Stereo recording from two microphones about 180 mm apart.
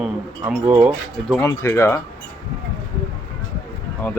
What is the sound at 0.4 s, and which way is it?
Speech, 25° right (ahead or behind).